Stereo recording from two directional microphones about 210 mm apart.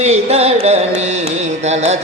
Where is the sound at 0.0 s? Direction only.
30° right (ahead or behind).